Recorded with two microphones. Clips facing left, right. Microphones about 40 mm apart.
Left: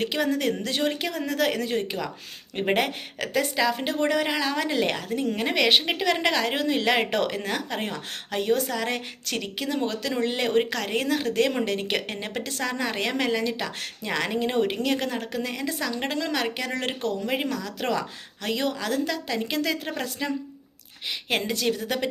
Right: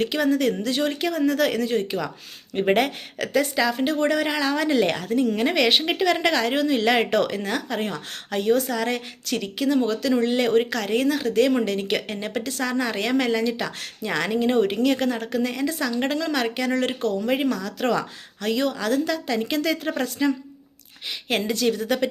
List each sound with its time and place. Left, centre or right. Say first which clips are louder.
0.0 s a woman's voice: right 4 dB; centre
2.6 s a woman's voice: right 3 dB; centre
16.0 s a woman's voice: right 1 dB; centre
16.7 s a woman's voice: right 5 dB; left
17.2 s a woman's voice: right 4 dB; centre
19.0 s a woman's voice: right 3 dB; centre
21.7 s a woman's voice: right 3 dB; centre